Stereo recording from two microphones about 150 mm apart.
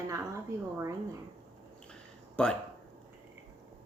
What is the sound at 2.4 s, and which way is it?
Speech, 5° left (ahead or behind).